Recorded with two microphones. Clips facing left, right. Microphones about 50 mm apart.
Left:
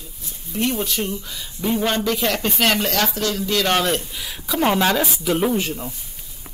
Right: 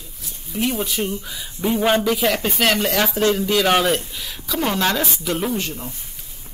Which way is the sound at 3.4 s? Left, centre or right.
Centre.